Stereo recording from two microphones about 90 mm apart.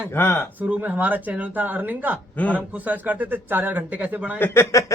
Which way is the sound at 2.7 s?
20° right (ahead or behind).